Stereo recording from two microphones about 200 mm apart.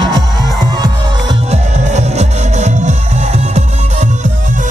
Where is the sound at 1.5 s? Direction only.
35° right (ahead or behind).